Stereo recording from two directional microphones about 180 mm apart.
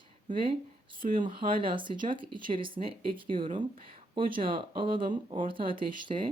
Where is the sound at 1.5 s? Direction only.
30° right (ahead or behind).